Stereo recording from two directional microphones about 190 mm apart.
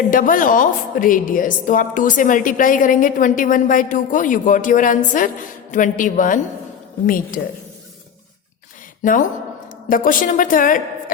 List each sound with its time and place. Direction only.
0.1 s a woman's voice: 45° left (ahead or behind)
9.9 s a woman's voice: 45° left (ahead or behind)